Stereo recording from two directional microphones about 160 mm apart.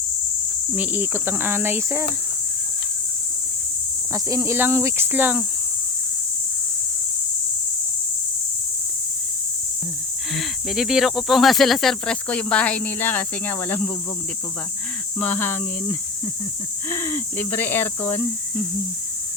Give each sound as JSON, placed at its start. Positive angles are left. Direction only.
{"t": 0.8, "sound": "cricket", "side_deg": -15}
{"t": 4.1, "sound": "cricket", "side_deg": -20}
{"t": 10.3, "sound": "speech", "side_deg": 0}
{"t": 15.2, "sound": "speech", "side_deg": 10}
{"t": 16.9, "sound": "speech", "side_deg": 15}